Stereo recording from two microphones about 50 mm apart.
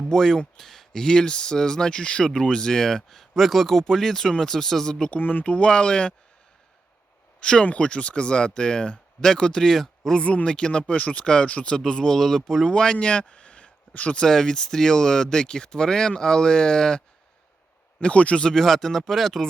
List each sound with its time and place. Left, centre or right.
0.1 s speech: centre
5.1 s speech: left
7.4 s speech: centre
10.2 s speech: left
11.8 s speech: centre
14.2 s speech: centre
18.0 s speech: left; by 19.5 s centre